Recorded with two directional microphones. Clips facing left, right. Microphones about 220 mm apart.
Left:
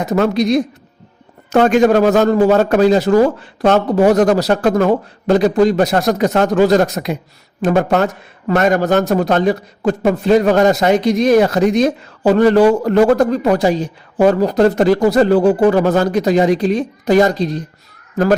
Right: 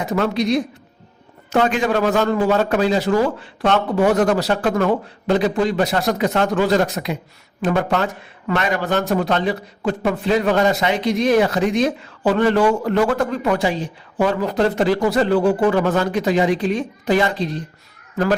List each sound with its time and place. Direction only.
0.0 s a man's voice: 40° left (ahead or behind)